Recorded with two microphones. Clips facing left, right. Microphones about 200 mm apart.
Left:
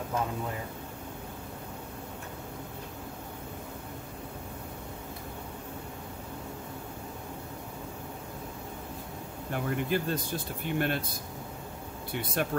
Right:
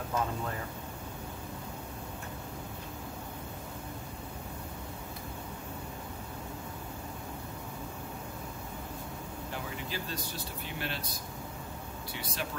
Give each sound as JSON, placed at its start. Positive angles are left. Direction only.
{"t": 9.5, "sound": "speech", "side_deg": 55}